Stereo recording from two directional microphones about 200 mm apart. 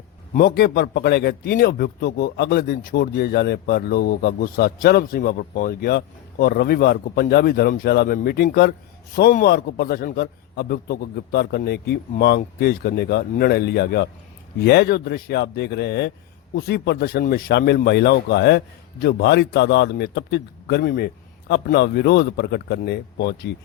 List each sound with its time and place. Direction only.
0.3 s a man's voice: 50° left (ahead or behind)